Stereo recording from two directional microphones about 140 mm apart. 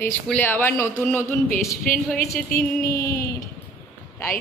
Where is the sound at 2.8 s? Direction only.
25° left (ahead or behind).